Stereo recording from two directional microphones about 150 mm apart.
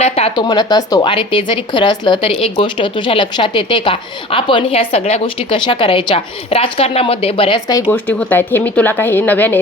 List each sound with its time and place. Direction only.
0.3 s speech: 30° left (ahead or behind)
7.9 s speech: 10° left (ahead or behind)